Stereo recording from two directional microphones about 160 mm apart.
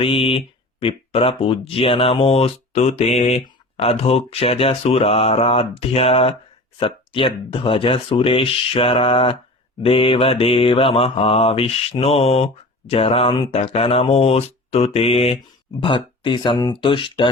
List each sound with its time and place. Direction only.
0.0 s speech: 35° left (ahead or behind)